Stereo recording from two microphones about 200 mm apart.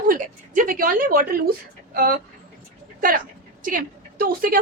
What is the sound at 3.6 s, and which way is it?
Speech, 45° right (ahead or behind).